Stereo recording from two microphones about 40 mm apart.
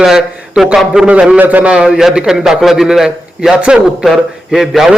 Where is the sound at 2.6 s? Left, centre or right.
Centre.